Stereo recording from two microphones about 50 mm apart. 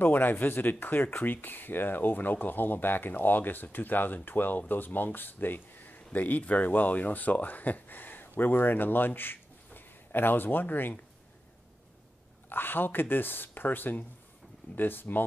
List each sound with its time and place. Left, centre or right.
0.0 s speech: left
12.4 s speech: left